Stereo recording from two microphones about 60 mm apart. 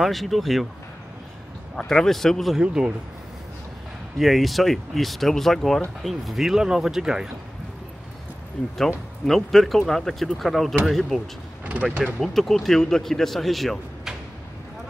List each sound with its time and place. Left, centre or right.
0.0 s speech: centre
1.8 s a man's voice: centre
2.5 s speech: centre
4.2 s speech: centre
8.7 s speech: centre
11.6 s mechanisms: right
12.0 s speech: centre